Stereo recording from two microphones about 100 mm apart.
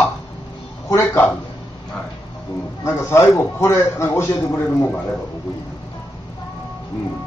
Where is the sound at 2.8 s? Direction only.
30° left (ahead or behind).